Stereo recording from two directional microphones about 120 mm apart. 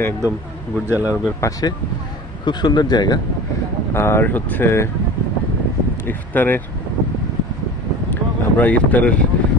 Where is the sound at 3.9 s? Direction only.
20° left (ahead or behind).